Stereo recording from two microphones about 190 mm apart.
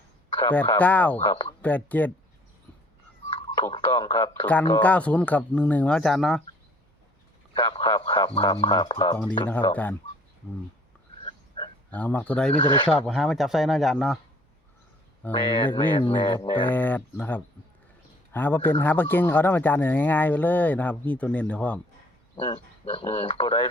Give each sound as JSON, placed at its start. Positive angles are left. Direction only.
{"t": 0.8, "sound": "a man's voice", "side_deg": 10}
{"t": 1.2, "sound": "speech", "side_deg": 25}
{"t": 1.6, "sound": "a man's voice", "side_deg": 10}
{"t": 3.3, "sound": "speech", "side_deg": 25}
{"t": 4.4, "sound": "a man's voice", "side_deg": 10}
{"t": 7.5, "sound": "speech", "side_deg": 25}
{"t": 11.2, "sound": "a sound", "side_deg": 25}
{"t": 11.9, "sound": "a man's voice", "side_deg": 10}
{"t": 12.5, "sound": "speech", "side_deg": 25}
{"t": 13.1, "sound": "speech", "side_deg": 0}
{"t": 15.4, "sound": "speech", "side_deg": 25}
{"t": 16.6, "sound": "a man's voice", "side_deg": 10}
{"t": 22.4, "sound": "speech", "side_deg": 25}